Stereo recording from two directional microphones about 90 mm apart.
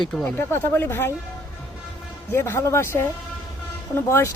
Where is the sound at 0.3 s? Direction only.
25° left (ahead or behind).